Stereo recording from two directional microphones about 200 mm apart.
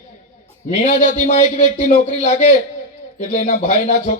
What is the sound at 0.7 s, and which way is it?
Speech, 35° left (ahead or behind).